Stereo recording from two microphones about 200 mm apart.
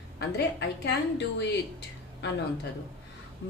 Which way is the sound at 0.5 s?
60° left (ahead or behind).